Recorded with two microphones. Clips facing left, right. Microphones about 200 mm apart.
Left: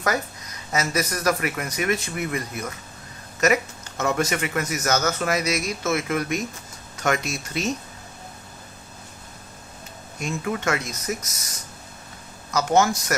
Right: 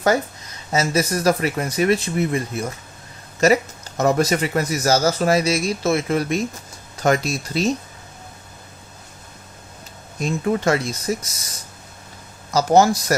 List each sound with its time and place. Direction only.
0.7 s speech: 30° right (ahead or behind)
10.2 s speech: 35° right (ahead or behind)
12.5 s speech: 35° right (ahead or behind)